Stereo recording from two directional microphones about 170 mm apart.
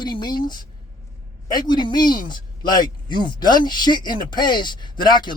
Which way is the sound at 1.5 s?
25° left (ahead or behind).